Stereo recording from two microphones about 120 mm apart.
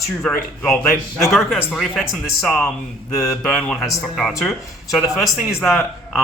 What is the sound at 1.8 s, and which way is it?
Speech, centre (ahead or behind).